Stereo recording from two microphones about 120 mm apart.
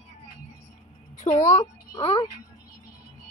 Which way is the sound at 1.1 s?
85° left.